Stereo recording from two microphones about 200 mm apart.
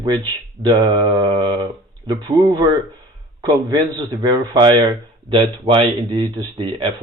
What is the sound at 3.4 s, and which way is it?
A man's voice, 20° right (ahead or behind).